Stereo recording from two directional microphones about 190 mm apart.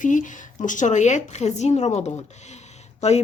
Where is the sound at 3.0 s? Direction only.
35° left (ahead or behind).